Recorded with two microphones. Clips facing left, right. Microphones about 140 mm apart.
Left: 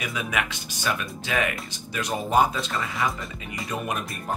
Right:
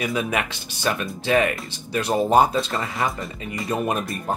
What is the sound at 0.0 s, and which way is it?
Speech, 35° right (ahead or behind).